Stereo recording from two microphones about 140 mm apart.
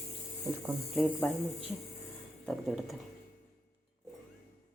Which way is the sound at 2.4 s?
5° left (ahead or behind).